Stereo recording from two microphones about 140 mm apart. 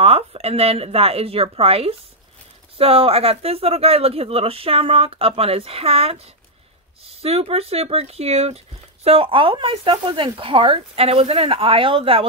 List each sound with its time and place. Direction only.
0.0 s speech: 45° right (ahead or behind)